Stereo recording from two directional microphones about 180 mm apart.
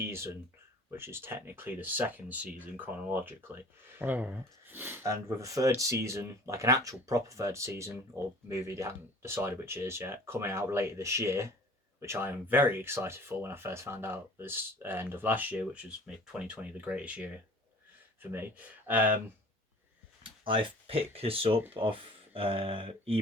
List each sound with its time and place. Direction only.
0.0 s speech: 15° right (ahead or behind)
20.4 s speech: 30° right (ahead or behind)